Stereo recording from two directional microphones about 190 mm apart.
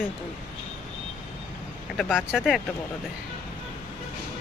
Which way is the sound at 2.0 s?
5° right (ahead or behind).